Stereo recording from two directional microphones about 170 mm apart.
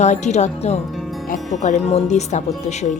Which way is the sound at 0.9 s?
Centre (ahead or behind).